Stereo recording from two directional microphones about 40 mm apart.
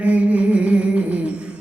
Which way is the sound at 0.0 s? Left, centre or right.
Right.